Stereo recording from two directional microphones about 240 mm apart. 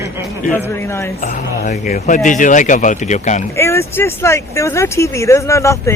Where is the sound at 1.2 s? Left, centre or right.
Left.